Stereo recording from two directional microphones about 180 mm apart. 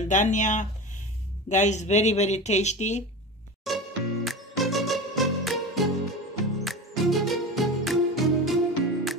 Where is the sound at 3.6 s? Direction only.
Centre (ahead or behind).